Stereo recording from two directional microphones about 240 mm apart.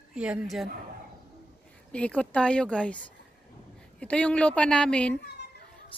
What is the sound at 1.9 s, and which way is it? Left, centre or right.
A woman's voice, centre.